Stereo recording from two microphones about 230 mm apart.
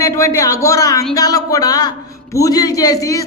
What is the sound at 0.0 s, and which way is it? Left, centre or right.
Speech, centre.